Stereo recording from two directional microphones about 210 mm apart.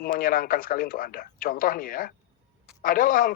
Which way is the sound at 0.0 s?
45° left (ahead or behind).